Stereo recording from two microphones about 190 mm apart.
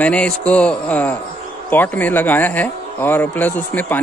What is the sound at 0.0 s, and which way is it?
Speech, 5° left (ahead or behind).